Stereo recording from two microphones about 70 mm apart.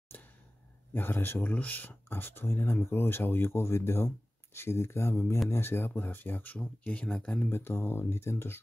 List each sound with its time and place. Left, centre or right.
0.1 s a sound: left
0.9 s speech: left; by 7.4 s centre
7.4 s speech: left